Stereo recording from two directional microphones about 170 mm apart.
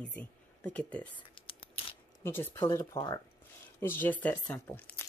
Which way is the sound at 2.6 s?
25° left (ahead or behind).